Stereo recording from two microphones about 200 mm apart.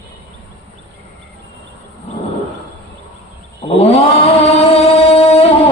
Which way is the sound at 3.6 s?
30° left (ahead or behind).